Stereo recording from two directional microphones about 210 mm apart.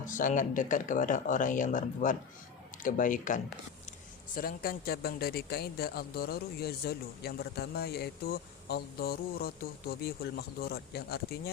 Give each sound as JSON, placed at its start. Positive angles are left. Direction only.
{"t": 0.0, "sound": "speech", "side_deg": 40}